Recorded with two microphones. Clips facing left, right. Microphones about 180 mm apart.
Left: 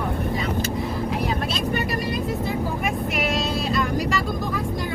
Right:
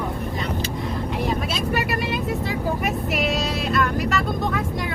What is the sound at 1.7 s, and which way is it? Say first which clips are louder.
Vehicle: right 3 dB; 85° right.